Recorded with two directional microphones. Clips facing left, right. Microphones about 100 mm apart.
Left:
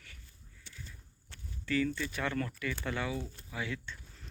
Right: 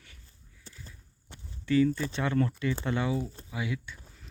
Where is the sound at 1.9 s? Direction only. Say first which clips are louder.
Right 5 dB; 30° right (ahead or behind); by 3.9 s 15° right (ahead or behind).